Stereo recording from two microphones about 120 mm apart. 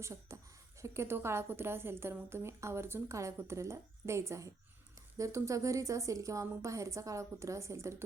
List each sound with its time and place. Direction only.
0.0 s a woman's voice: 25° right (ahead or behind)